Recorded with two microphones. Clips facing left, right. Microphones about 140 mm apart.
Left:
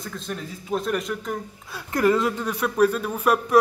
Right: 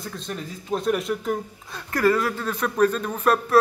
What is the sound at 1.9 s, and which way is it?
Speech, 20° left (ahead or behind).